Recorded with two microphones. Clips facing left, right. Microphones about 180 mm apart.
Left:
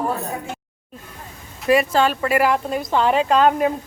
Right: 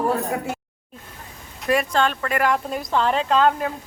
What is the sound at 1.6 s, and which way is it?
Speech, centre (ahead or behind).